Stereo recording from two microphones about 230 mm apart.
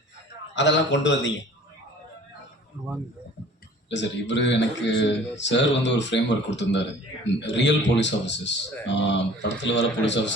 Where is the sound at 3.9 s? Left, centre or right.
Left.